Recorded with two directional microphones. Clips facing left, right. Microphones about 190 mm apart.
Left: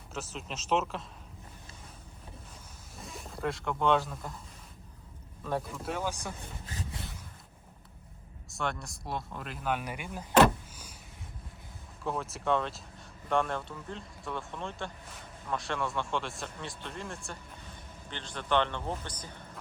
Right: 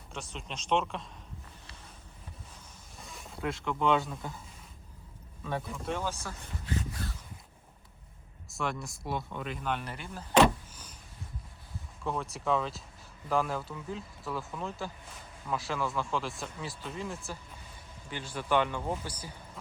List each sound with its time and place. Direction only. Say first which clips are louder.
0.1 s speech: left 2 dB; 5° left (ahead or behind)
3.0 s speech: left 2 dB; centre (ahead or behind)
5.4 s speech: left 2 dB; centre (ahead or behind)
6.7 s a sound: right 5 dB; 20° left (ahead or behind)
8.4 s speech: even; centre (ahead or behind)
10.3 s vehicle: left 1 dB; 5° left (ahead or behind)
12.0 s speech: even; centre (ahead or behind)